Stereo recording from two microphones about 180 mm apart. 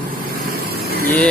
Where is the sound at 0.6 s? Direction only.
60° right (ahead or behind).